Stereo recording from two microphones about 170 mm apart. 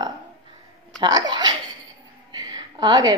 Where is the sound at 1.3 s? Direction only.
25° right (ahead or behind).